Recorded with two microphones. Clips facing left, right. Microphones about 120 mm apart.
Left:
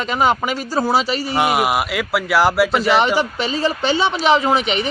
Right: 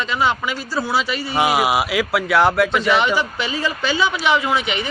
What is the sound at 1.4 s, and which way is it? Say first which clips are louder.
Speech: right 1 dB; centre (ahead or behind).